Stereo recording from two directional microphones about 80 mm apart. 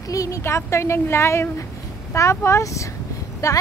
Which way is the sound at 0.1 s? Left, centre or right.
Left.